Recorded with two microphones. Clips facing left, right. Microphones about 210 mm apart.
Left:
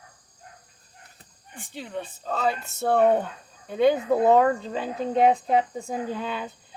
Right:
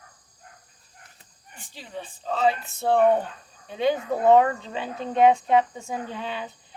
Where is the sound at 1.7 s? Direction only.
55° left (ahead or behind).